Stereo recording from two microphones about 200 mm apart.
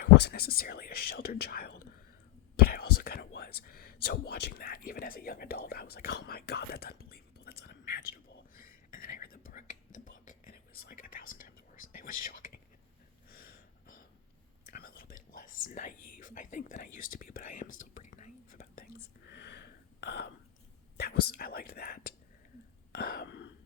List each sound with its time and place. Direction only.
0.0 s speech: 55° left (ahead or behind)
2.6 s whispering: 50° left (ahead or behind)
13.3 s snort: 45° left (ahead or behind)
14.7 s speech: 45° left (ahead or behind)
17.7 s whispering: 40° left (ahead or behind); by 20.3 s 55° left (ahead or behind)
21.0 s speech: 50° left (ahead or behind)
22.9 s whispering: 50° left (ahead or behind)